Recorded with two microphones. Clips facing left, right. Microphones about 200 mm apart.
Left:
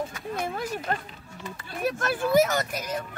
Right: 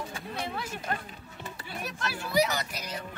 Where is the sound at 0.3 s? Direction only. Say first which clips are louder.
Left 5 dB; 45° left (ahead or behind).